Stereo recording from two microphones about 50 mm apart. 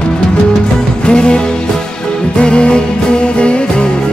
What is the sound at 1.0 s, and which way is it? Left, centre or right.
Music, centre.